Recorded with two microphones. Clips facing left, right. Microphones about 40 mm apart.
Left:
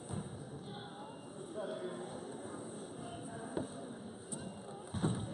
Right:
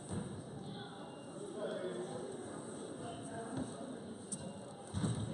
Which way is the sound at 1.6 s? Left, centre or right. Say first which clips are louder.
Even; centre.